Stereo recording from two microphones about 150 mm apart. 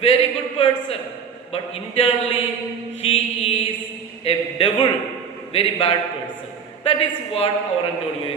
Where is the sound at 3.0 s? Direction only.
40° left (ahead or behind).